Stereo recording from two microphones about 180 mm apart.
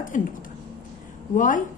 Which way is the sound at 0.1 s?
45° left (ahead or behind).